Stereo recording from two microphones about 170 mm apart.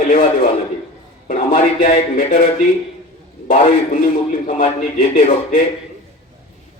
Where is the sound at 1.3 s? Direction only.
50° left (ahead or behind).